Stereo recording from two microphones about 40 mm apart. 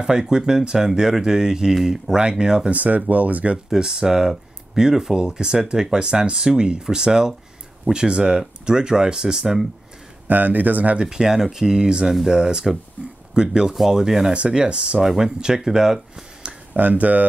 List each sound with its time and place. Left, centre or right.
0.0 s speech: centre
2.7 s speech: right
3.7 s speech: centre
10.2 s speech: right
11.0 s speech: centre
13.0 s speech: left
13.3 s speech: centre
16.7 s speech: right